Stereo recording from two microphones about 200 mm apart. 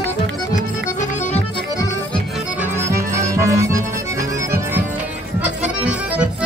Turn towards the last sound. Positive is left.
turn(degrees=-5)  # may be behind; listen again after turning